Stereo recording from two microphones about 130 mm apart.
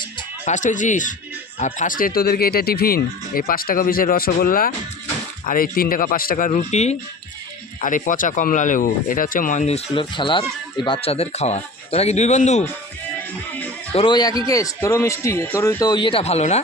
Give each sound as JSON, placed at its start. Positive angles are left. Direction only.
{"t": 0.4, "sound": "speech", "side_deg": 75}
{"t": 3.3, "sound": "speech", "side_deg": 90}
{"t": 7.8, "sound": "speech", "side_deg": 85}
{"t": 13.9, "sound": "a man's voice", "side_deg": 40}
{"t": 15.8, "sound": "speech", "side_deg": 35}